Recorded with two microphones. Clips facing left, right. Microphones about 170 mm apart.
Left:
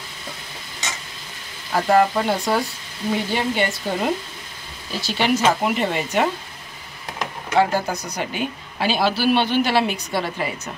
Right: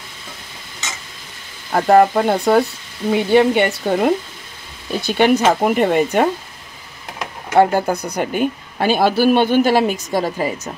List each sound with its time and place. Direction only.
1.7 s speech: 50° right (ahead or behind)
7.5 s speech: 55° right (ahead or behind); by 10.7 s 40° right (ahead or behind)